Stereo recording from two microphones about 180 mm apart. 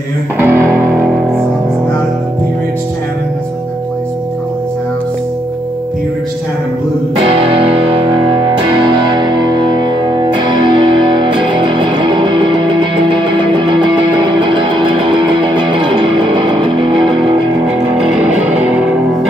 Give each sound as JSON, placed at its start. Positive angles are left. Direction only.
{"t": 0.4, "sound": "music", "side_deg": -15}
{"t": 7.2, "sound": "music", "side_deg": -30}
{"t": 18.0, "sound": "music", "side_deg": -5}